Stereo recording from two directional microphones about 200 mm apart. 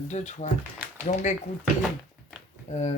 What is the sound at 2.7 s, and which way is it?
Speech, 40° left (ahead or behind).